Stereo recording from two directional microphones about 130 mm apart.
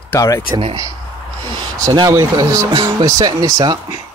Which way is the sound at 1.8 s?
30° right (ahead or behind).